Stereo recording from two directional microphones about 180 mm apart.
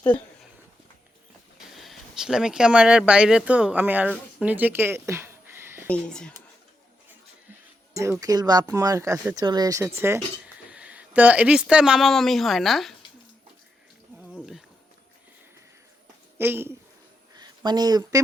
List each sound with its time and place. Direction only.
1.5 s speech: centre (ahead or behind)
5.9 s speech: 5° left (ahead or behind)
7.9 s speech: 15° right (ahead or behind); by 13.0 s centre (ahead or behind)
14.2 s a sound: 5° right (ahead or behind)
16.4 s speech: 10° right (ahead or behind)
17.3 s a sound: 25° right (ahead or behind)